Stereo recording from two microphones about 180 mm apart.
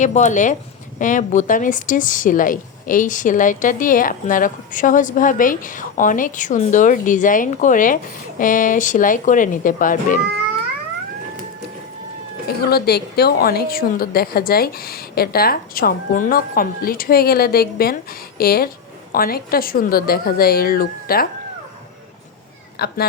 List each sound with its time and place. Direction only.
0.0 s a woman's voice: 40° left (ahead or behind)
12.5 s a woman's voice: 60° left (ahead or behind)
22.8 s a woman's voice: 60° left (ahead or behind)